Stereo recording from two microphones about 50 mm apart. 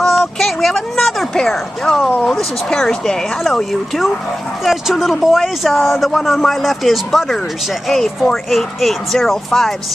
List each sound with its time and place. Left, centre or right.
0.0 s a sound: centre
1.4 s speech: centre
2.0 s speech: left
2.3 s speech: centre